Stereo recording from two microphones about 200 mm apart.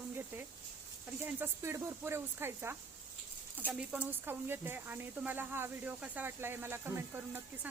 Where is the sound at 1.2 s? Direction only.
10° right (ahead or behind).